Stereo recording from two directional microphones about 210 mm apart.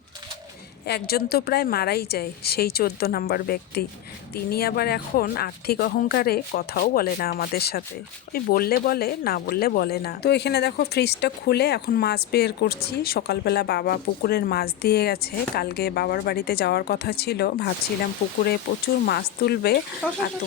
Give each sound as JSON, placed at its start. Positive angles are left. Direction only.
{"t": 0.9, "sound": "speech", "side_deg": 50}
{"t": 19.0, "sound": "speech", "side_deg": 50}
{"t": 20.0, "sound": "speech", "side_deg": 5}